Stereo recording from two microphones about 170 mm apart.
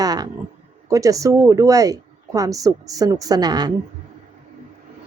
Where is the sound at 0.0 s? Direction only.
20° right (ahead or behind).